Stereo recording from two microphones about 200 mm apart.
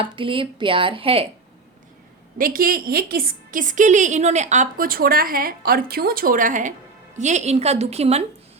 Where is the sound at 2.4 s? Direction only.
45° right (ahead or behind).